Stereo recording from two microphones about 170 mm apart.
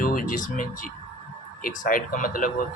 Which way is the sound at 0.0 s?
55° left (ahead or behind).